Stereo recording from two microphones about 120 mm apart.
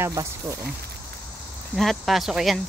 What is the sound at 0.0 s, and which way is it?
Speech, 25° right (ahead or behind).